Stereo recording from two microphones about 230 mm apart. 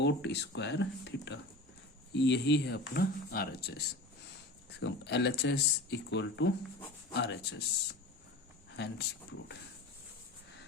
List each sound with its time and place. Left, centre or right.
0.0 s speech: left
8.7 s speech: left